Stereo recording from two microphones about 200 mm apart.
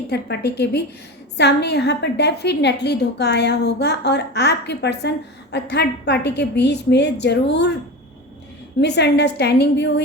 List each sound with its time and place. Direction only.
0.1 s a woman's voice: 55° left (ahead or behind)
8.8 s a woman's voice: 55° left (ahead or behind)